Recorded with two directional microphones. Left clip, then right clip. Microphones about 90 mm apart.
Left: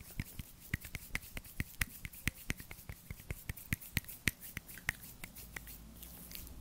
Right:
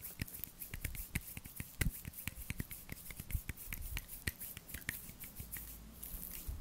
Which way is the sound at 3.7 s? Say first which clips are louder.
Left 10 dB; 35° left (ahead or behind).